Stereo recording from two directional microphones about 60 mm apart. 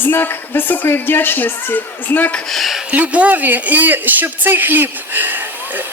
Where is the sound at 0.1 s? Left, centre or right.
Left.